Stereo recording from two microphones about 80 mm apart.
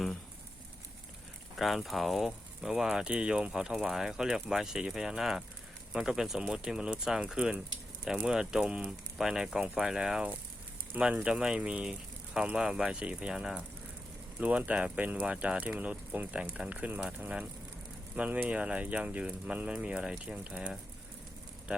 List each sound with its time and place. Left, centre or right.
1.5 s speech: centre